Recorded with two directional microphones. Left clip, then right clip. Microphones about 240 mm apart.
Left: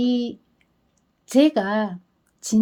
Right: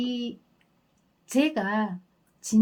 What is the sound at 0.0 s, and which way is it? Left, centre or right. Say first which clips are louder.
Speech: left 8 dB; left.